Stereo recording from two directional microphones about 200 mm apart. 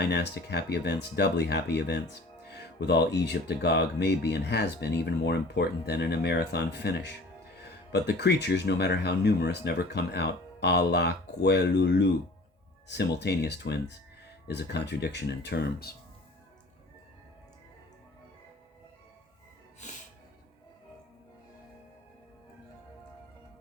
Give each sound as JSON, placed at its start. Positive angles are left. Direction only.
{"t": 0.0, "sound": "speech", "side_deg": 55}
{"t": 19.8, "sound": "music", "side_deg": 35}